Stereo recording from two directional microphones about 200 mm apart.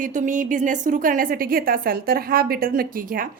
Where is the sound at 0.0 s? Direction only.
40° right (ahead or behind).